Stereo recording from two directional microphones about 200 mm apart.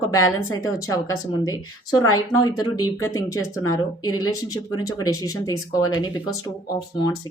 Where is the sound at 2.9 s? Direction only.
15° left (ahead or behind).